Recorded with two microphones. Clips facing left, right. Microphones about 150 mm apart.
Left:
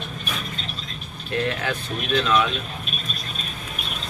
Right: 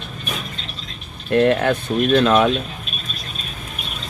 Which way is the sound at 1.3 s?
55° right (ahead or behind).